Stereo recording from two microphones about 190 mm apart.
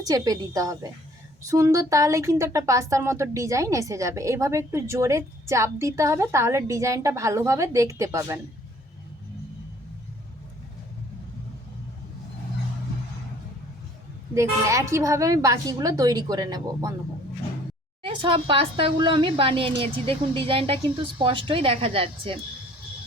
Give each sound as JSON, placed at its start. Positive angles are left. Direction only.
{"t": 0.0, "sound": "a woman's voice", "side_deg": -20}
{"t": 14.3, "sound": "a woman's voice", "side_deg": -15}
{"t": 18.0, "sound": "a woman's voice", "side_deg": -25}